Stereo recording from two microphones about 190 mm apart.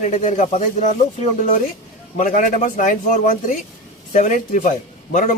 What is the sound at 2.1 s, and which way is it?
A man's voice, 40° left (ahead or behind).